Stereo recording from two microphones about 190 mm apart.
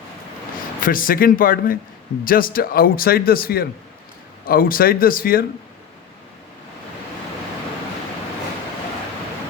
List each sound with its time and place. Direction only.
0.8 s speech: 45° left (ahead or behind)